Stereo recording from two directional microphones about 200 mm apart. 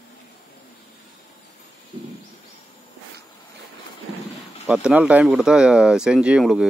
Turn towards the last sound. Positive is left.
turn(degrees=-5)  # may be behind; listen again after turning